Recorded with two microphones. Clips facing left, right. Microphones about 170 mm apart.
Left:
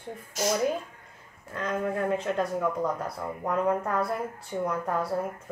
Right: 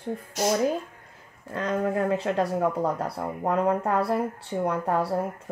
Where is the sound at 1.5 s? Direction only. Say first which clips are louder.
Right 3 dB; 35° right (ahead or behind).